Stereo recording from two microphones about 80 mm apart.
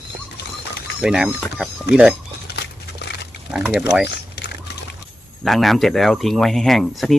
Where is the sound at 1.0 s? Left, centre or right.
Centre.